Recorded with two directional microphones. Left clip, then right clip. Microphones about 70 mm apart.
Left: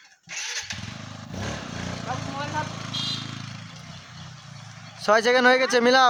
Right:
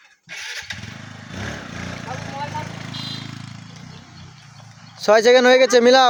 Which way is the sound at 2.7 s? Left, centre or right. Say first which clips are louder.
Left 1 dB; right.